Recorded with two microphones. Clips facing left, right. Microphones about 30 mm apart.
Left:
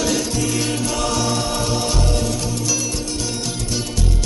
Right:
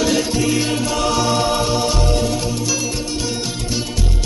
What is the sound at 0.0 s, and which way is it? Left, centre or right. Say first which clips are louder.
Music: right 3 dB; centre.